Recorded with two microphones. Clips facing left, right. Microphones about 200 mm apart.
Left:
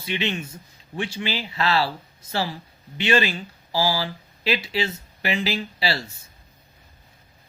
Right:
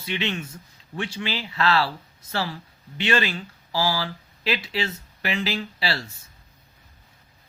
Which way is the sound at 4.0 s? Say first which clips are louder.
Left 1 dB; 5° left (ahead or behind).